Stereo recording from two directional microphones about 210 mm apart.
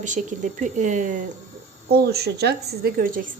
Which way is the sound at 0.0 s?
35° right (ahead or behind).